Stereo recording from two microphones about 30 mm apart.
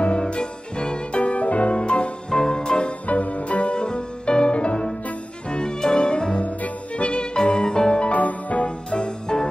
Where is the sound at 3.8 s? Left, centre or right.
Left.